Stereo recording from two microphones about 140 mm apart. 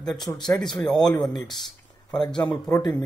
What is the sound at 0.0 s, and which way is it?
A man's voice, 25° left (ahead or behind).